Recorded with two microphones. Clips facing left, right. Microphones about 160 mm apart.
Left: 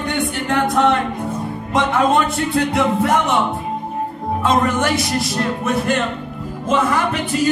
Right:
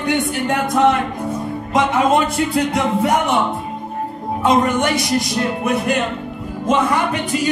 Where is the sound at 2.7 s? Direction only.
Centre (ahead or behind).